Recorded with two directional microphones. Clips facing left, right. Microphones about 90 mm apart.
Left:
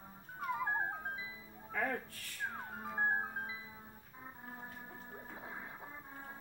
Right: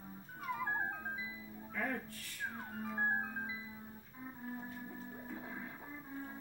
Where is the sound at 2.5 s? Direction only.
20° left (ahead or behind).